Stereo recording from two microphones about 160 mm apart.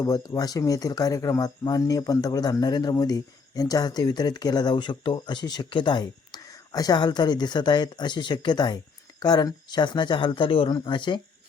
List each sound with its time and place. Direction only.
0.0 s speech: 20° left (ahead or behind)